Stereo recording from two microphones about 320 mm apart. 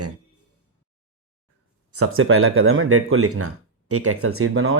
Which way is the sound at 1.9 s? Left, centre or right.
Right.